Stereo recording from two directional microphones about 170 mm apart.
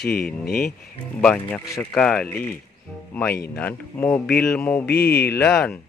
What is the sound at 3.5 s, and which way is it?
Speech, 10° left (ahead or behind).